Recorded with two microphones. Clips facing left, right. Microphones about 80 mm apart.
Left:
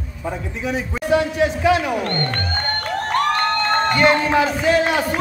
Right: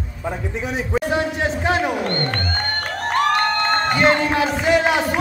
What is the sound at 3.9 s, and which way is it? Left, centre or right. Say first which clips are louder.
Speech: left 2 dB; right.